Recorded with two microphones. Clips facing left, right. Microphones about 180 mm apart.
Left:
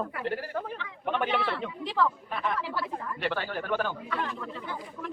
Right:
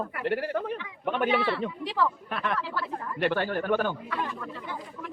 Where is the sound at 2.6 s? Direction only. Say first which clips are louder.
Even; 15° left (ahead or behind).